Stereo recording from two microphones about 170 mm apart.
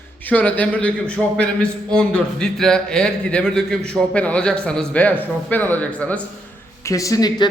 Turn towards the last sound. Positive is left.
turn(degrees=20)  # may be behind; listen again after turning